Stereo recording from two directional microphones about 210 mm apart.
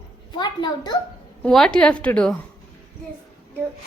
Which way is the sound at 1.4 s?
5° left (ahead or behind).